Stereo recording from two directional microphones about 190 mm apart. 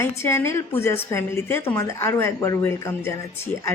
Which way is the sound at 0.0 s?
15° left (ahead or behind).